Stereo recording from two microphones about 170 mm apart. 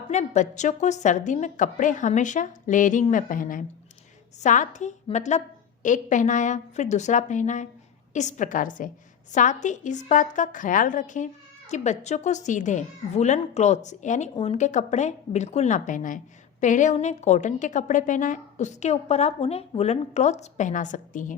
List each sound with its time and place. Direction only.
0.1 s a woman's voice: 45° left (ahead or behind)